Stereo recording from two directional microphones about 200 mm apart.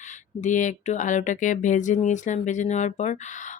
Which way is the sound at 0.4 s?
40° left (ahead or behind).